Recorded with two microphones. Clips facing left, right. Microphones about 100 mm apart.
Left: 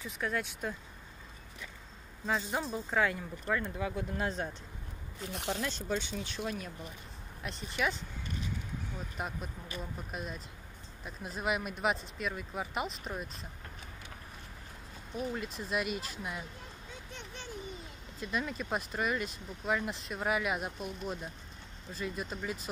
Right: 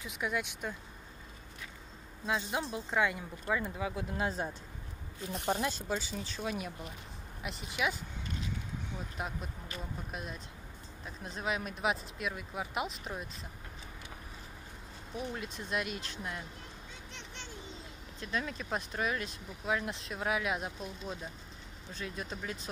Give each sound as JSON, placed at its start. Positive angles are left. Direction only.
{"t": 0.0, "sound": "speech", "side_deg": -10}
{"t": 2.2, "sound": "speech", "side_deg": -5}
{"t": 5.7, "sound": "speech", "side_deg": -5}
{"t": 9.1, "sound": "speech", "side_deg": 0}
{"t": 15.1, "sound": "speech", "side_deg": 0}
{"t": 18.2, "sound": "speech", "side_deg": 5}
{"t": 21.9, "sound": "speech", "side_deg": 0}